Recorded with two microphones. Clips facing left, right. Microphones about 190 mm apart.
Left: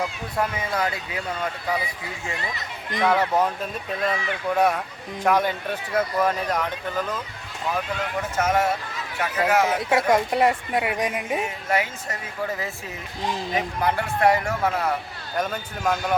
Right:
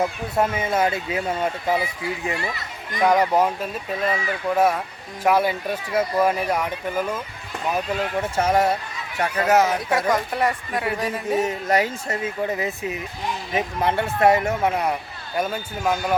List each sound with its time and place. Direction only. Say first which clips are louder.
0.3 s speech: right 4 dB; 25° right (ahead or behind)
3.0 s speech: right 3 dB; 10° right (ahead or behind)
8.2 s speech: right 2 dB; 35° right (ahead or behind)
9.9 s a woman's voice: left 2 dB; 25° left (ahead or behind)
11.3 s speech: right 7 dB; 40° right (ahead or behind); by 14.9 s 20° right (ahead or behind)
15.4 s speech: right 2 dB; 10° right (ahead or behind)